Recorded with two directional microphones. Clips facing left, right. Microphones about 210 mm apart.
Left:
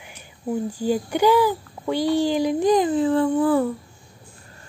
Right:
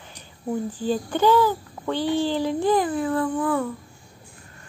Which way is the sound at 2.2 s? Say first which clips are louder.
Left 3 dB; 15° left (ahead or behind).